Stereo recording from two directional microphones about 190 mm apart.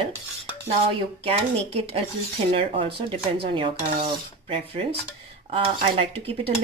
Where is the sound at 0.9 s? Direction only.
30° right (ahead or behind).